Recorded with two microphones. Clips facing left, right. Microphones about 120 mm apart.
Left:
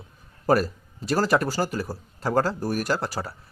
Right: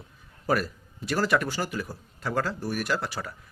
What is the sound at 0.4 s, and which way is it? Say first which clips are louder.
A man's voice: left 5 dB; 40° left (ahead or behind).